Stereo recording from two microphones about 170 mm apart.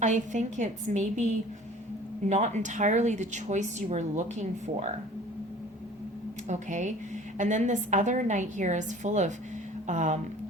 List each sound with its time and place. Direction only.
0.0 s a woman's voice: 45° right (ahead or behind)
2.3 s a woman's voice: 45° right (ahead or behind)
6.5 s a woman's voice: 45° right (ahead or behind)